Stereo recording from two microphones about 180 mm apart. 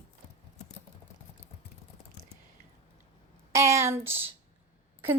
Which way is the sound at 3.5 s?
15° right (ahead or behind).